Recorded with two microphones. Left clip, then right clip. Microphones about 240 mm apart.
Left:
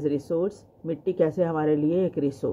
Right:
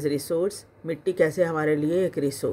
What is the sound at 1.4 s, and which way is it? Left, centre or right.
Speech, right.